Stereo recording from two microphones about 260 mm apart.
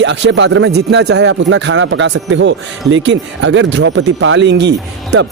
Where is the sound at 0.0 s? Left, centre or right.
Right.